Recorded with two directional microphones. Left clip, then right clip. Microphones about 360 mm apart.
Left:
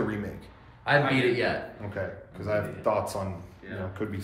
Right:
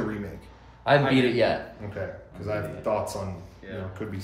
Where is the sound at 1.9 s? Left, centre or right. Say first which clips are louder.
Even; centre.